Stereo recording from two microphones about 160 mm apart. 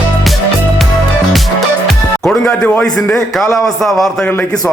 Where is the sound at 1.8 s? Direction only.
Centre (ahead or behind).